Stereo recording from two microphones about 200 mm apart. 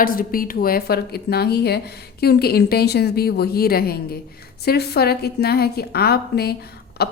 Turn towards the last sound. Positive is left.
turn(degrees=50)  # may be behind; listen again after turning